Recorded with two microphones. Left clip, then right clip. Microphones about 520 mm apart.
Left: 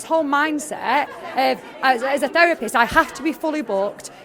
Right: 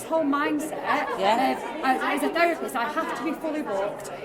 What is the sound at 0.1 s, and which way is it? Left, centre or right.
A woman's voice, left.